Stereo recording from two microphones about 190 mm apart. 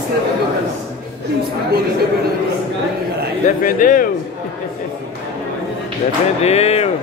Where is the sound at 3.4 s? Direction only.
45° left (ahead or behind).